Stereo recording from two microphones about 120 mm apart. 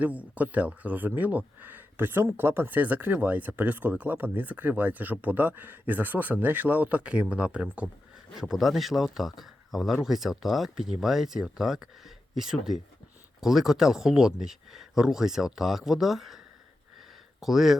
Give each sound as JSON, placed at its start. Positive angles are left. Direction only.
{"t": 0.0, "sound": "speech", "side_deg": -10}
{"t": 17.4, "sound": "speech", "side_deg": -5}